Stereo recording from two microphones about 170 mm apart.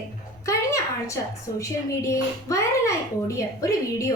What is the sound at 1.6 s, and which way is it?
A child's voice, 20° left (ahead or behind).